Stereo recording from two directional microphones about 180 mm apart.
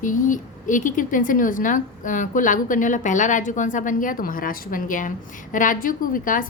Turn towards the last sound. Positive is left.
turn(degrees=50)  # may be behind; listen again after turning